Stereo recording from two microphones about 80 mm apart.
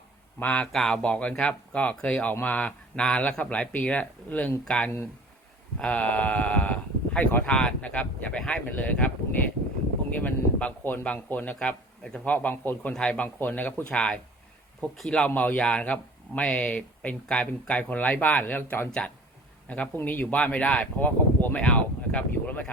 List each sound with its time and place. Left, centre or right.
0.3 s speech: centre
12.9 s speech: centre
13.2 s speech: left
13.9 s speech: centre
15.3 s a man's voice: centre